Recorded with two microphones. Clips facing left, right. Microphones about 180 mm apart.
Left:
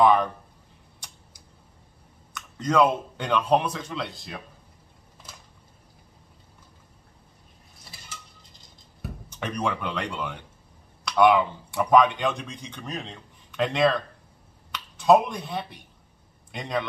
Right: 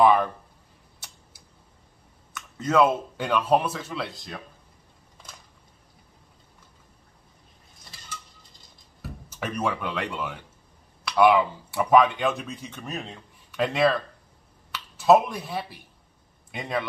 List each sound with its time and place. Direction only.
0.0 s speech: 5° right (ahead or behind)
2.3 s speech: 5° right (ahead or behind)
9.3 s speech: 5° right (ahead or behind)